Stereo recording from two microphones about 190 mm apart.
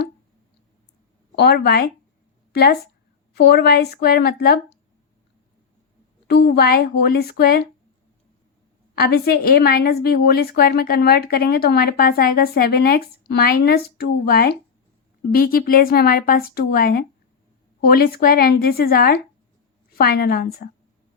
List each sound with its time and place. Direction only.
1.4 s a woman's voice: 55° left (ahead or behind)
6.2 s a woman's voice: 60° left (ahead or behind)
9.0 s a woman's voice: 55° left (ahead or behind)